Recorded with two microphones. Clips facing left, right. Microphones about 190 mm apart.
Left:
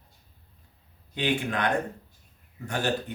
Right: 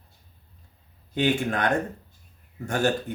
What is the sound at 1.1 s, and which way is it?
Speech, 45° right (ahead or behind).